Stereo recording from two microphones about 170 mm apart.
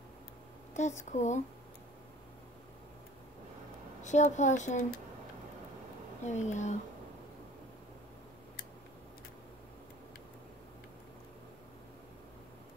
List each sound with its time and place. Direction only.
0.7 s speech: 45° left (ahead or behind)
4.0 s speech: 45° left (ahead or behind)
6.2 s speech: 45° left (ahead or behind)